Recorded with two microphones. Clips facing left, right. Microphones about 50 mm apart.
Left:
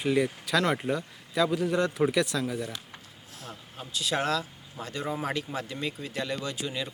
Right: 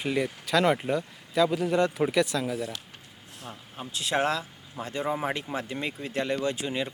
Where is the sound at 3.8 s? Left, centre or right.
Right.